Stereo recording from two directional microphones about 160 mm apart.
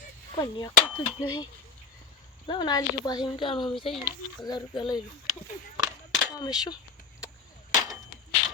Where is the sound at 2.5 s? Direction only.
25° left (ahead or behind).